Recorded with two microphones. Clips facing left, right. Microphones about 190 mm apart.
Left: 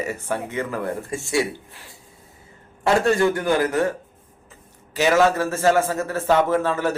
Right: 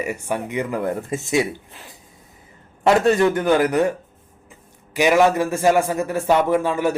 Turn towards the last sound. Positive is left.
turn(degrees=-15)  # may be behind; listen again after turning